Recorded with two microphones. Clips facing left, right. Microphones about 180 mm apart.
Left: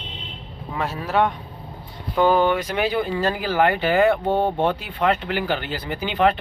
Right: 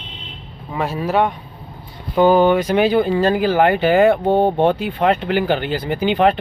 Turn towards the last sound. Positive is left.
turn(degrees=-20)  # may be behind; listen again after turning